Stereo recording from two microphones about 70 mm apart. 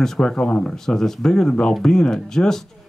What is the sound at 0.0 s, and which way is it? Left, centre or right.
Speech, centre.